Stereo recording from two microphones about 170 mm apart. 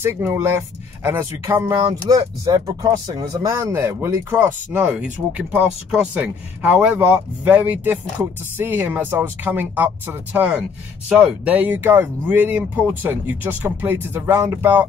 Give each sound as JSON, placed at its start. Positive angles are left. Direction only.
{"t": 0.0, "sound": "speech", "side_deg": -15}